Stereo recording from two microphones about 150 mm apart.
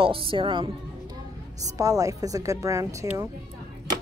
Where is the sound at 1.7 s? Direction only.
25° right (ahead or behind).